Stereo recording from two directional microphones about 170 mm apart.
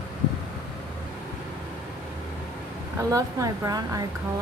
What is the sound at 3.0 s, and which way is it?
Speech, 20° right (ahead or behind).